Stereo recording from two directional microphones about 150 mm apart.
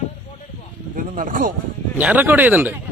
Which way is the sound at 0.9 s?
65° right (ahead or behind).